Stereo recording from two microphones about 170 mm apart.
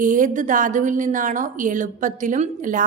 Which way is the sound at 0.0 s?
50° right (ahead or behind).